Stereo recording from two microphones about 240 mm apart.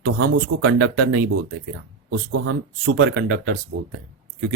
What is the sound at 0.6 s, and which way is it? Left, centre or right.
Speech, right.